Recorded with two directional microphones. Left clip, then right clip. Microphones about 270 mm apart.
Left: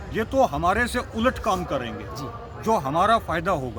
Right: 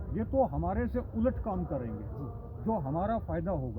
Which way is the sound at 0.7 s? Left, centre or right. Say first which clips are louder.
Left 12 dB; centre.